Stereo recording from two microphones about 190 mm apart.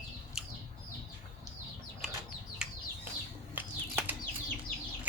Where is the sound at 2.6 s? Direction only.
5° right (ahead or behind).